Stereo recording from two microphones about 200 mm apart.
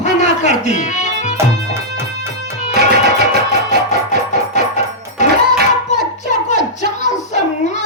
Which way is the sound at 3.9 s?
35° left (ahead or behind).